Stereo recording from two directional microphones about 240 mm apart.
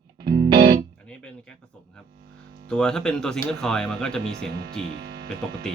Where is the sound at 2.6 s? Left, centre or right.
Centre.